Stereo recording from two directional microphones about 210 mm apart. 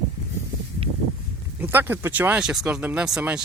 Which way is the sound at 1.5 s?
10° right (ahead or behind).